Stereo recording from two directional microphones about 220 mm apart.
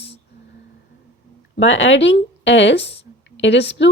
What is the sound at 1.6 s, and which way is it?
Speech, 60° left (ahead or behind).